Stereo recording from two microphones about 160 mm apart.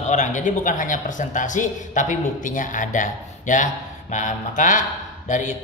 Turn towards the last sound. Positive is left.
turn(degrees=50)  # may be behind; listen again after turning